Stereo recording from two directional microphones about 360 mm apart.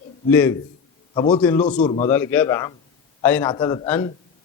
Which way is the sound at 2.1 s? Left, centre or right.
Centre.